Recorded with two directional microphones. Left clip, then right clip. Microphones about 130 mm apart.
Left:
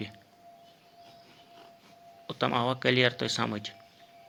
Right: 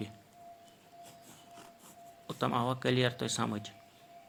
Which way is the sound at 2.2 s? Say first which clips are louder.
Left 4 dB; 25° left (ahead or behind).